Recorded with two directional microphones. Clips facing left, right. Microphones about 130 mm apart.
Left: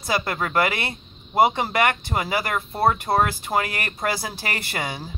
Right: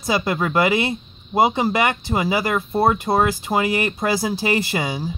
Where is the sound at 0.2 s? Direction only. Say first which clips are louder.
Right 3 dB; 15° right (ahead or behind).